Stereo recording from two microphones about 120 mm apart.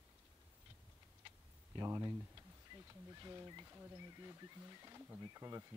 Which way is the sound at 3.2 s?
30° right (ahead or behind).